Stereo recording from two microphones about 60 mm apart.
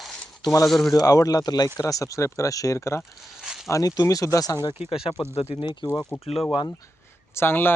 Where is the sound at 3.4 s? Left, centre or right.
Centre.